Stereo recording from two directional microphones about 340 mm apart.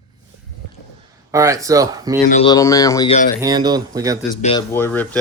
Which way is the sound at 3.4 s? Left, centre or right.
Centre.